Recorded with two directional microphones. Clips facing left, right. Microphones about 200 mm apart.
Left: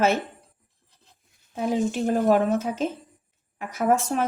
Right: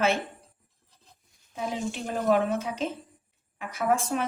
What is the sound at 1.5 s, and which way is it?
A woman's voice, 45° left (ahead or behind).